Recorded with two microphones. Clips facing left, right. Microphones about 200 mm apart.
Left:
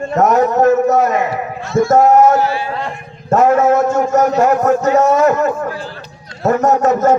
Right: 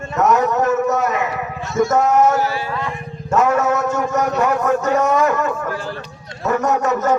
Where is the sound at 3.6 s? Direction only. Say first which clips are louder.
Left 6 dB; 50° left (ahead or behind).